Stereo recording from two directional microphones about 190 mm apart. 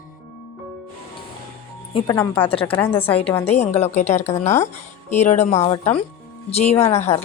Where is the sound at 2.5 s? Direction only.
30° left (ahead or behind).